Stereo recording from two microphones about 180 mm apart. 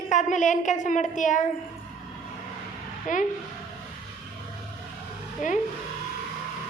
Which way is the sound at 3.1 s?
45° left (ahead or behind).